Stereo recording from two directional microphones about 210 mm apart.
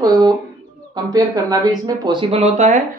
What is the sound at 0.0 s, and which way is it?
Bird, 20° right (ahead or behind).